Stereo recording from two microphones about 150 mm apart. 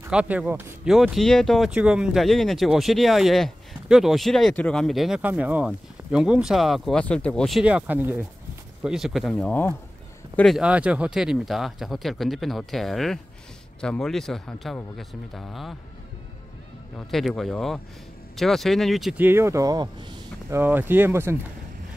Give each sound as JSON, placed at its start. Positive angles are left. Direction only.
{"t": 0.1, "sound": "speech", "side_deg": -5}
{"t": 0.8, "sound": "speech", "side_deg": 0}
{"t": 16.9, "sound": "speech", "side_deg": 0}
{"t": 19.1, "sound": "speech", "side_deg": -15}
{"t": 20.5, "sound": "speech", "side_deg": -15}